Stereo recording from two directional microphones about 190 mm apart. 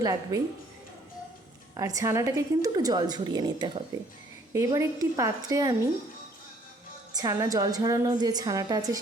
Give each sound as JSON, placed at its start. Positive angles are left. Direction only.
{"t": 0.0, "sound": "a woman's voice", "side_deg": -20}
{"t": 1.7, "sound": "a woman's voice", "side_deg": -20}
{"t": 7.1, "sound": "a woman's voice", "side_deg": -20}